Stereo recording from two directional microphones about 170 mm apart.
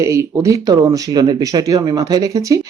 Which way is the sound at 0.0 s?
20° right (ahead or behind).